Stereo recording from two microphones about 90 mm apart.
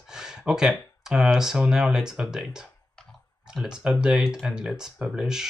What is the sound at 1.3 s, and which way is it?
Speech, 5° right (ahead or behind).